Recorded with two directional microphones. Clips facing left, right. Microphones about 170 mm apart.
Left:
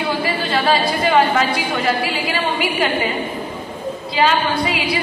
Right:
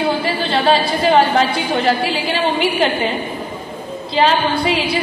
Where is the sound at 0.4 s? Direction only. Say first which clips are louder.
Right 2 dB; 30° right (ahead or behind).